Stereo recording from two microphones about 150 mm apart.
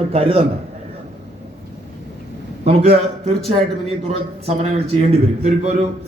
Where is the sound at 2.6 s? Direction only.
45° right (ahead or behind).